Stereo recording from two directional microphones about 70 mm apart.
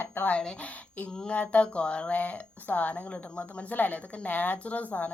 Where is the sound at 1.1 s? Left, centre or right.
Centre.